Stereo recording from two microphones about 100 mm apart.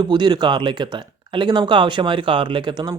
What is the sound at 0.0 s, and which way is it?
Speech, 45° right (ahead or behind).